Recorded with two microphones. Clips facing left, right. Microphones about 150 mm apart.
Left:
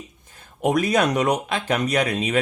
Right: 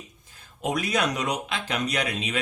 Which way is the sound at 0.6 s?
50° left (ahead or behind).